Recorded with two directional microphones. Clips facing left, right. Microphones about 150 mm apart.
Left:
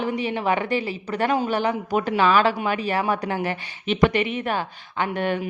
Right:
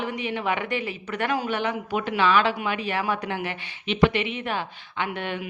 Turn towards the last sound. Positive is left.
turn(degrees=45)  # may be behind; listen again after turning